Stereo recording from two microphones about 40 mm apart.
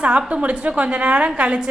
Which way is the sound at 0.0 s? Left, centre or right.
Right.